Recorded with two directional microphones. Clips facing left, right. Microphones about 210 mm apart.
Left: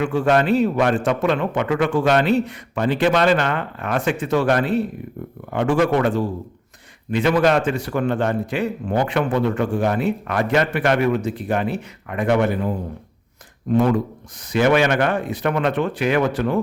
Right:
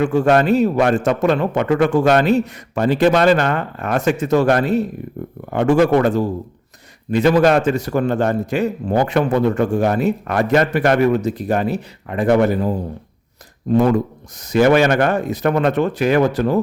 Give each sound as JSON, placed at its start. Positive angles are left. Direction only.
{"t": 0.0, "sound": "a man's voice", "side_deg": -40}